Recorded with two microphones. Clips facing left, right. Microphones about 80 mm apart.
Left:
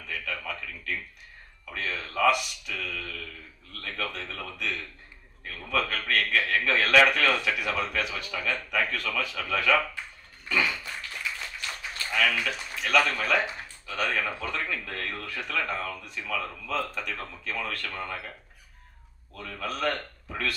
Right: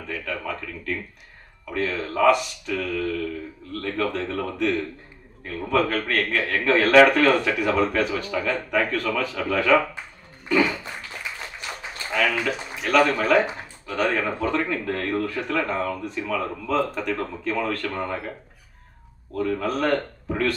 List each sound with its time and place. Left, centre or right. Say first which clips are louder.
0.0 s a sound: right 5 dB; right
1.7 s a man's voice: right 8 dB; right
10.5 s a sound: right 7 dB; right
12.1 s speech: right 4 dB; right
12.8 s a man's voice: right 6 dB; right
19.3 s a man's voice: right 10 dB; right